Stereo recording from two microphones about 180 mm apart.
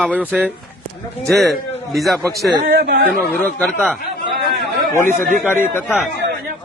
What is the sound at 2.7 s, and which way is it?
Speech, 60° right (ahead or behind).